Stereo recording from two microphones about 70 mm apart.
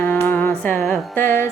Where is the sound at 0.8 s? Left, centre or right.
Centre.